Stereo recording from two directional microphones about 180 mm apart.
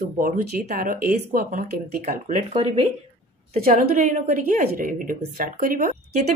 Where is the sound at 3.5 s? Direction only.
55° right (ahead or behind).